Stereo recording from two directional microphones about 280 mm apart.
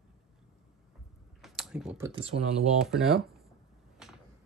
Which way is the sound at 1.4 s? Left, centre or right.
Centre.